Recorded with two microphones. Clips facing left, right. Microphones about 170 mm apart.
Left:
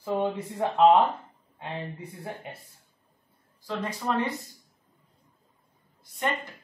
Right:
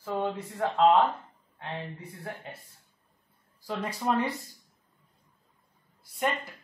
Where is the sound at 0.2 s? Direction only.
15° left (ahead or behind).